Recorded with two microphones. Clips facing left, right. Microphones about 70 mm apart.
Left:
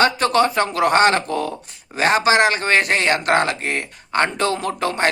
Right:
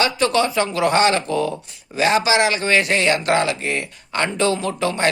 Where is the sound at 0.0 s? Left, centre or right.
Left.